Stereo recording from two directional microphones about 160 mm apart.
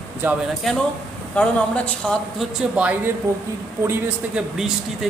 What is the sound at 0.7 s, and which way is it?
Speech, 5° left (ahead or behind).